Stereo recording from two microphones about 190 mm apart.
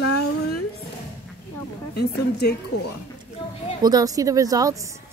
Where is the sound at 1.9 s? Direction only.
60° left (ahead or behind).